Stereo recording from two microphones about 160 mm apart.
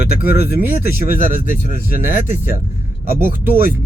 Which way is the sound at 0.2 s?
80° left.